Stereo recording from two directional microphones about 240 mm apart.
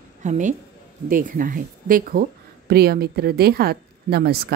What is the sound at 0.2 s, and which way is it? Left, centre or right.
A woman's voice, right.